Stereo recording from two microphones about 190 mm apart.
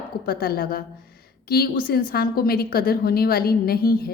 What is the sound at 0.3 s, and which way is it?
A woman's voice, 50° left (ahead or behind).